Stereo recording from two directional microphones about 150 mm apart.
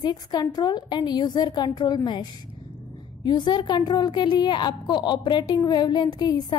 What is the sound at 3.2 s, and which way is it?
A woman's voice, 30° left (ahead or behind).